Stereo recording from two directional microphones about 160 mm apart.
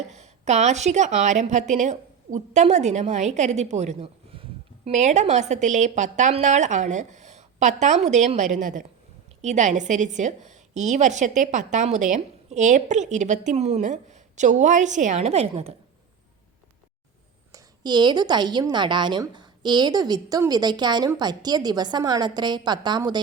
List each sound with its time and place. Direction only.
0.0 s a woman's voice: 45° right (ahead or behind)
4.9 s a woman's voice: 50° right (ahead or behind)
17.5 s a woman's voice: 25° right (ahead or behind)